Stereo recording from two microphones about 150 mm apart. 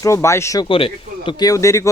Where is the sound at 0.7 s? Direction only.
35° left (ahead or behind); by 1.9 s 20° left (ahead or behind).